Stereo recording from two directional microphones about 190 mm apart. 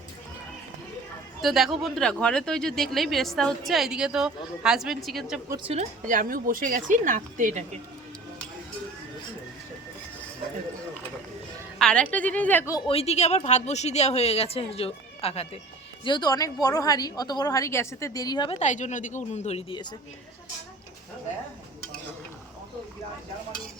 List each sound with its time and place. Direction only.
1.4 s speech: centre (ahead or behind)
5.6 s a woman's voice: 35° right (ahead or behind)
11.8 s a woman's voice: 5° left (ahead or behind)
12.9 s a woman's voice: 35° left (ahead or behind)
18.6 s speech: 40° left (ahead or behind)